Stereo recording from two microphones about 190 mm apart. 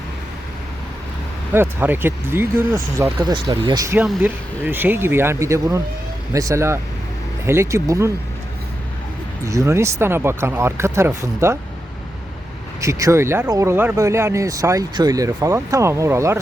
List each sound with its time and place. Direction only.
1.5 s speech: 10° right (ahead or behind)
9.4 s speech: 15° right (ahead or behind)
12.8 s speech: 15° right (ahead or behind)